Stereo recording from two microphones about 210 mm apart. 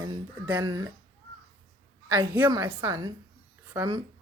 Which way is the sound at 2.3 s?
10° right (ahead or behind).